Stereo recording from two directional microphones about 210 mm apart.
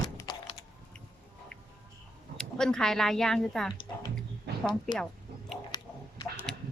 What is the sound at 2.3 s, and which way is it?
Speech, 5° left (ahead or behind).